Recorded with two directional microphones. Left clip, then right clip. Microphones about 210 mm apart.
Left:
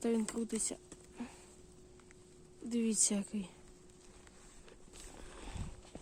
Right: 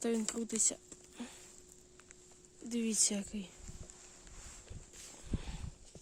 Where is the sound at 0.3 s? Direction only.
20° right (ahead or behind).